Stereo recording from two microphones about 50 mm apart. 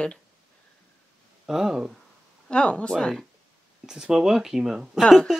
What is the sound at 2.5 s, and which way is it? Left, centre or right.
Speech, left.